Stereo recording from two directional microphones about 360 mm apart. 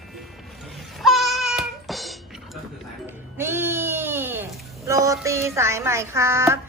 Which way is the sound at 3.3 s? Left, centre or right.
Centre.